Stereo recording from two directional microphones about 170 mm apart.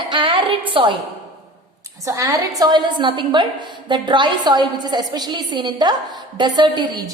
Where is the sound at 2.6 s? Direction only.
25° right (ahead or behind).